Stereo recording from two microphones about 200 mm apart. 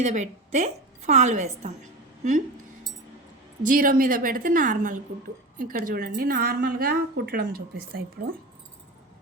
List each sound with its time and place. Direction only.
0.0 s a woman's voice: 35° right (ahead or behind)
3.6 s a woman's voice: 40° right (ahead or behind)